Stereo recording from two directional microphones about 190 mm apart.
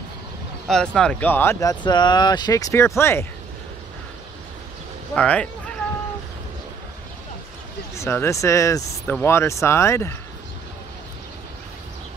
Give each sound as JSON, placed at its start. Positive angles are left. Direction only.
{"t": 0.7, "sound": "speech", "side_deg": 5}
{"t": 5.1, "sound": "speech", "side_deg": 5}
{"t": 7.9, "sound": "speech", "side_deg": 15}